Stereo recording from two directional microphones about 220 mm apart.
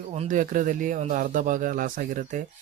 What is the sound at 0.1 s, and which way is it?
Speech, 30° right (ahead or behind).